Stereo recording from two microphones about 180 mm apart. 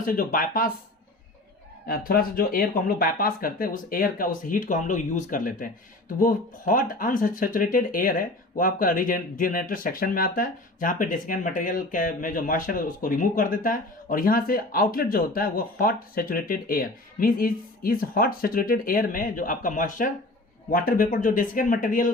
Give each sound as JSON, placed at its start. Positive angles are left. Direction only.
{"t": 0.0, "sound": "speech", "side_deg": 50}
{"t": 1.9, "sound": "speech", "side_deg": 55}